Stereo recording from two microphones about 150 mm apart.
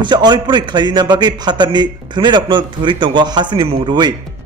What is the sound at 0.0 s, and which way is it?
A man's voice, 30° right (ahead or behind).